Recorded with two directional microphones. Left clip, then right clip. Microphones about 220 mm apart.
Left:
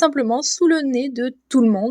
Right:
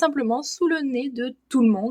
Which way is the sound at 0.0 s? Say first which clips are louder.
Left 4 dB; 30° left (ahead or behind).